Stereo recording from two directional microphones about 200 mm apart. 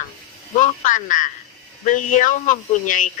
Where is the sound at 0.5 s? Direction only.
40° left (ahead or behind).